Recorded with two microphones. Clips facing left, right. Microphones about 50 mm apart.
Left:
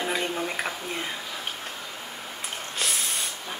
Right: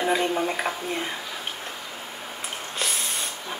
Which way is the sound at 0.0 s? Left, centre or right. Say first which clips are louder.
Right 5 dB; centre.